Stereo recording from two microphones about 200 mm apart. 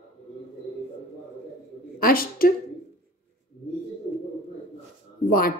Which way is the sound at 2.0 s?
45° left (ahead or behind).